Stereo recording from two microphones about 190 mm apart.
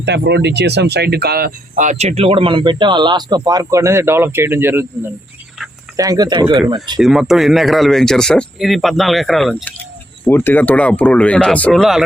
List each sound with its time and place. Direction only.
0.0 s speech: 65° right (ahead or behind); by 7.0 s 25° right (ahead or behind)
7.0 s speech: centre (ahead or behind)